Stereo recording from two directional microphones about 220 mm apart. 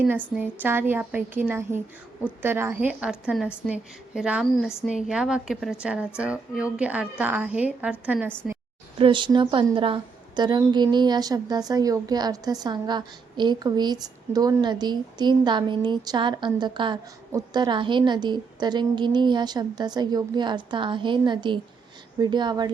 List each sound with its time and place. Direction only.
0.3 s a woman's voice: 10° right (ahead or behind)
9.0 s a woman's voice: 20° right (ahead or behind)